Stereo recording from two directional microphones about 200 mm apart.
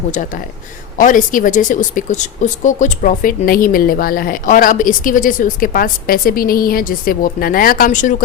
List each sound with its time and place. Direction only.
0.9 s a woman's voice: 40° left (ahead or behind)